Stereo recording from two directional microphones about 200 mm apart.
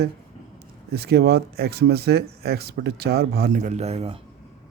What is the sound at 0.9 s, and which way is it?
Speech, 55° right (ahead or behind).